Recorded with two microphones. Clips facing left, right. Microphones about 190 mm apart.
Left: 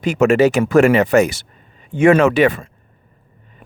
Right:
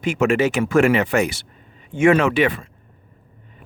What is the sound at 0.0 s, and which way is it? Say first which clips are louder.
Speech: left 5 dB; 40° left (ahead or behind).